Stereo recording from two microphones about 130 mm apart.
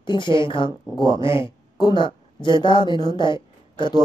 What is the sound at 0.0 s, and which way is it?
Speech, 35° left (ahead or behind).